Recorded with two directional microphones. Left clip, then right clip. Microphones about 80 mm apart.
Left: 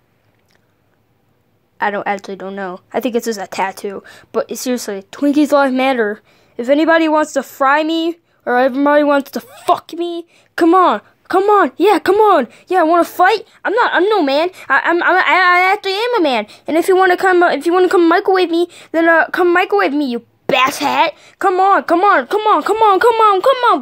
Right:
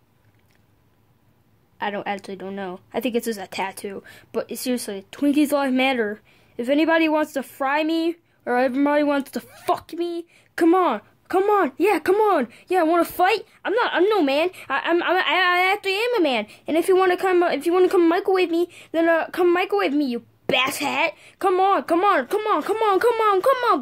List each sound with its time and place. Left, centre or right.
2.0 s a woman's voice: left
2.4 s a woman's voice: centre
2.9 s a woman's voice: left
13.7 s a woman's voice: centre
14.2 s speech: left
14.9 s a woman's voice: centre
15.1 s a woman's voice: left
19.0 s a woman's voice: left
21.5 s a woman's voice: centre
22.3 s a woman's voice: left